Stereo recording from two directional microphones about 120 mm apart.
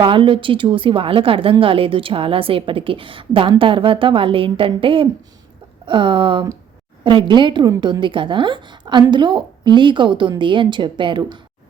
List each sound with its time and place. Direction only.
0.0 s a woman's voice: 45° right (ahead or behind)